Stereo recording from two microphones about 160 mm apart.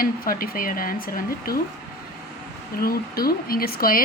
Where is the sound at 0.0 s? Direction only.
65° left (ahead or behind).